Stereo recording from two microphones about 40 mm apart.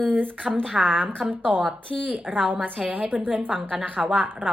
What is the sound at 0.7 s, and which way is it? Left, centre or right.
Speech, centre.